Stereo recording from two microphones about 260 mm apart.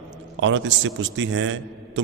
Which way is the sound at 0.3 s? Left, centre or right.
Right.